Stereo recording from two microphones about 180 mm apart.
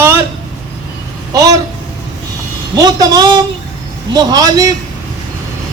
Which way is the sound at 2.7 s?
20° right (ahead or behind).